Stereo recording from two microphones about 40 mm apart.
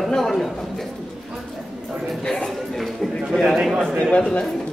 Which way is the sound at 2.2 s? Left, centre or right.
Centre.